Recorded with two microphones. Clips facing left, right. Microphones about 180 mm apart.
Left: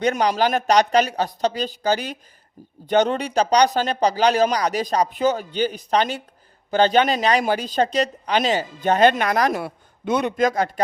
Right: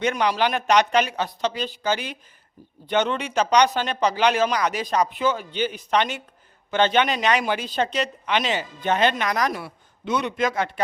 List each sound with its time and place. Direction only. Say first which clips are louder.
0.0 s speech: left 2 dB; 40° left (ahead or behind)